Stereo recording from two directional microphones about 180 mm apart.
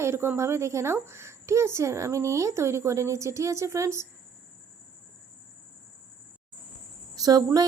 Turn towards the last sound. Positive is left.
turn(degrees=-20)  # may be behind; listen again after turning